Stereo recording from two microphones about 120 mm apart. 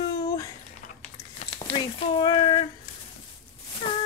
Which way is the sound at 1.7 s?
45° left (ahead or behind).